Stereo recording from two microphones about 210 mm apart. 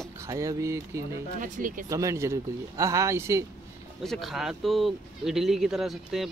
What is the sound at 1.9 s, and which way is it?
Speech, 15° right (ahead or behind).